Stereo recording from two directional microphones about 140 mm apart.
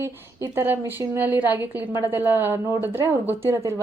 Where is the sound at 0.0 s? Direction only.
20° right (ahead or behind).